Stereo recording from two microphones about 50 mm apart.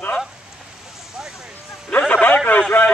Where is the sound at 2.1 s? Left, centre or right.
Left.